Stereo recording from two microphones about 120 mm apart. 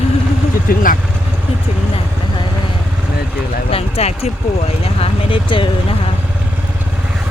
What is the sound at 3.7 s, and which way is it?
Speech, 60° left (ahead or behind).